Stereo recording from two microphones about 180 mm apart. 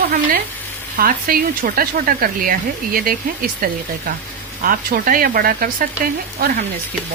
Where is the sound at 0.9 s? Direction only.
55° right (ahead or behind).